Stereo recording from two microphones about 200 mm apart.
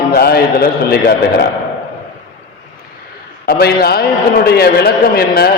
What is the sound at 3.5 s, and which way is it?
A man's voice, 50° left (ahead or behind).